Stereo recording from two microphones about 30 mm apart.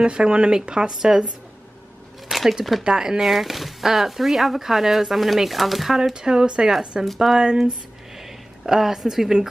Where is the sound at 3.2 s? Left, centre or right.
Centre.